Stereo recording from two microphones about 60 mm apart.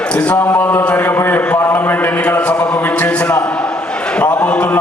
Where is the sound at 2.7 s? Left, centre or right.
Left.